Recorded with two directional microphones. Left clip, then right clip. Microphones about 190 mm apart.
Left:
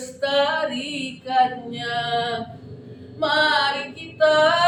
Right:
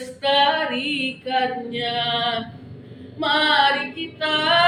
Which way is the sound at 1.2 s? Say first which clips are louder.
Left 6 dB; 25° left (ahead or behind).